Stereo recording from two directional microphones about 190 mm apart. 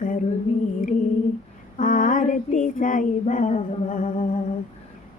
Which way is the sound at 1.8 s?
45° left (ahead or behind).